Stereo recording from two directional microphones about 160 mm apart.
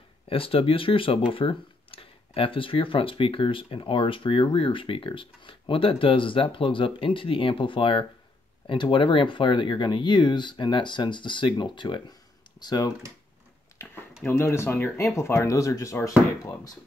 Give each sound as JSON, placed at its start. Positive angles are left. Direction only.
{"t": 0.3, "sound": "speech", "side_deg": 35}
{"t": 14.2, "sound": "speech", "side_deg": 15}